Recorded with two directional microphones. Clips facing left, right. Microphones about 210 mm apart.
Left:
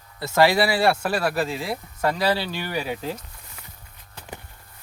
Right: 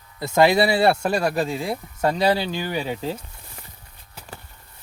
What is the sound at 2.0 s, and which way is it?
Speech, 25° right (ahead or behind).